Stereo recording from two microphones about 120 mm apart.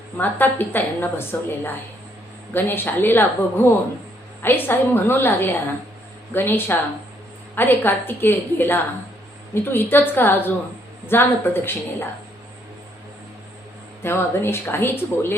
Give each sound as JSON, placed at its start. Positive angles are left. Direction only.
{"t": 0.2, "sound": "a woman's voice", "side_deg": 15}
{"t": 14.0, "sound": "speech", "side_deg": 20}